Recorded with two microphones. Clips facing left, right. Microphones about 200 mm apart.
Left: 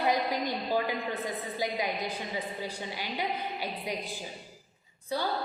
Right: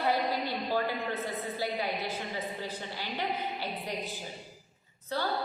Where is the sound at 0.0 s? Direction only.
15° left (ahead or behind).